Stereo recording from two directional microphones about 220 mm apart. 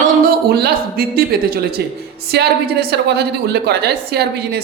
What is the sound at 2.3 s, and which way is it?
A man's voice, 50° right (ahead or behind).